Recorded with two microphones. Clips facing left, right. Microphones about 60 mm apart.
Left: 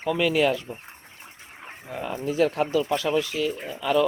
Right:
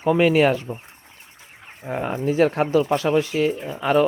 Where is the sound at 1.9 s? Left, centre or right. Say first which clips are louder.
Right 6 dB; right.